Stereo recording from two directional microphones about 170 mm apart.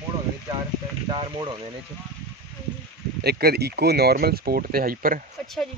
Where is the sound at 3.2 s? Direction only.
65° right (ahead or behind).